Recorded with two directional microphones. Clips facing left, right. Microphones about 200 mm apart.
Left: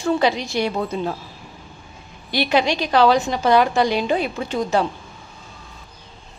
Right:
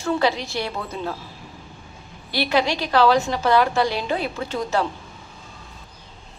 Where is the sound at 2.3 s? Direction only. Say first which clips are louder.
Left 2 dB; 20° left (ahead or behind).